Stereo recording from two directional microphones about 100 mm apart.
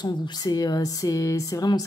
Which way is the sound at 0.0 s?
40° left (ahead or behind).